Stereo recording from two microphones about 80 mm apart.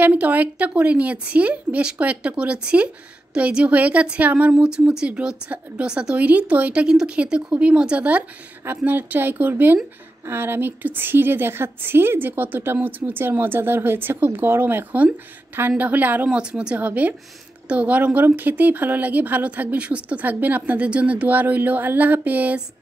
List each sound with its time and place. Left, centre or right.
0.0 s a woman's voice: centre
4.6 s a woman's voice: centre